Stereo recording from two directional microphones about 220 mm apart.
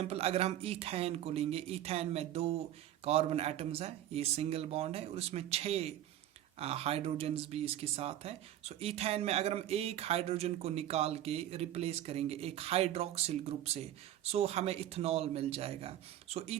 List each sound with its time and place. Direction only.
0.0 s speech: 25° right (ahead or behind)